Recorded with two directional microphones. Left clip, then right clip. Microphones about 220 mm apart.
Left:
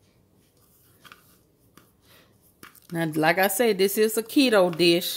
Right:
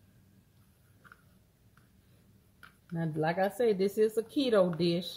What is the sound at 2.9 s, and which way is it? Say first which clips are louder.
Speech: left 9 dB; 50° left (ahead or behind).